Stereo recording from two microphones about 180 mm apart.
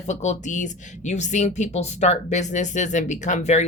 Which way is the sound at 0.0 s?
40° left (ahead or behind).